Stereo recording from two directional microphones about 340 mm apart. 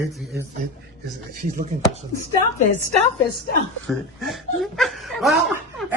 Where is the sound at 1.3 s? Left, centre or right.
Right.